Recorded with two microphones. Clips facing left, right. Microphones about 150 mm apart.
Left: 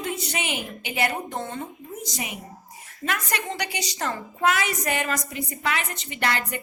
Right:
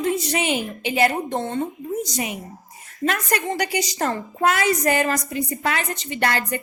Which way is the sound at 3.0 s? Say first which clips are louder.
Right 6 dB; 45° right (ahead or behind).